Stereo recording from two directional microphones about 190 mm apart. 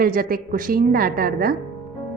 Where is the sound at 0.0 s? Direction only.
50° right (ahead or behind).